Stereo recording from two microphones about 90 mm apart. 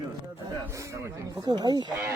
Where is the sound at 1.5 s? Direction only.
55° right (ahead or behind).